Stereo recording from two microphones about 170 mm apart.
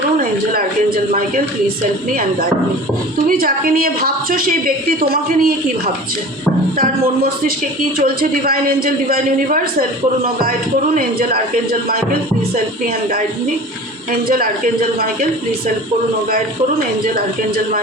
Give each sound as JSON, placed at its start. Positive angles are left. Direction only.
{"t": 3.2, "sound": "a woman's voice", "side_deg": -60}
{"t": 10.9, "sound": "a woman's voice", "side_deg": -60}
{"t": 14.1, "sound": "a woman's voice", "side_deg": -60}